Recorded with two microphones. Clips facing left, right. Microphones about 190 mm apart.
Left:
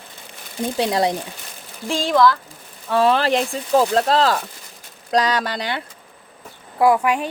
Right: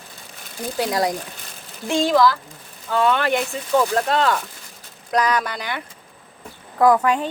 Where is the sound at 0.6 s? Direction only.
25° left (ahead or behind).